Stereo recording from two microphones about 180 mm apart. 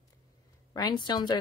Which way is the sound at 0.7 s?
25° left (ahead or behind).